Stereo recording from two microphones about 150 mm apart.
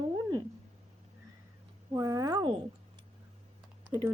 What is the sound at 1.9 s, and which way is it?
Speech, 25° right (ahead or behind).